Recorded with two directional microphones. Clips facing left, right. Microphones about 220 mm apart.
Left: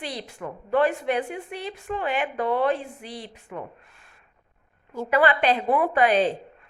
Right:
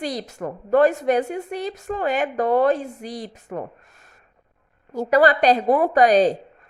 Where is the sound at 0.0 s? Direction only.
45° right (ahead or behind).